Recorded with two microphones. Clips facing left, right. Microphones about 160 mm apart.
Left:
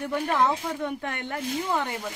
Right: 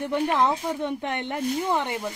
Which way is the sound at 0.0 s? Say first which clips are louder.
Right 2 dB; 20° right (ahead or behind).